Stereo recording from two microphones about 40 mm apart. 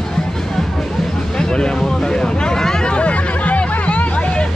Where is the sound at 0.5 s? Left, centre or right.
Centre.